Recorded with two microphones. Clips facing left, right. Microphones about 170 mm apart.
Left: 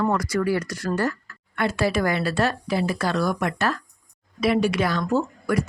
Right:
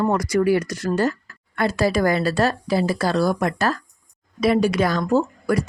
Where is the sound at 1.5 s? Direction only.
40° right (ahead or behind).